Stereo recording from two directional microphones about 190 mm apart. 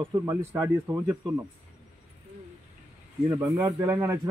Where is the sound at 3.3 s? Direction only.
20° right (ahead or behind).